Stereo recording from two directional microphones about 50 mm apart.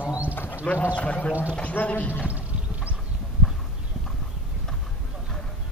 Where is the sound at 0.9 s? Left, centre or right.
Left.